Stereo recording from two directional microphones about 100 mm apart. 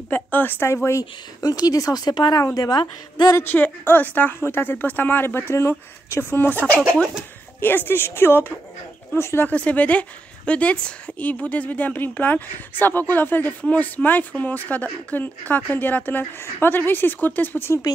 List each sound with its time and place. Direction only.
0.1 s speech: 20° left (ahead or behind)
0.8 s speech: 35° left (ahead or behind)
3.4 s speech: 20° left (ahead or behind)